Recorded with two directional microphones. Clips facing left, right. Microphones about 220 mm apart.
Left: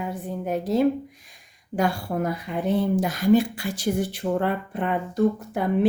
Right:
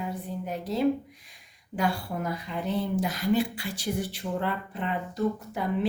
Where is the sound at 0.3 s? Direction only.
50° left (ahead or behind).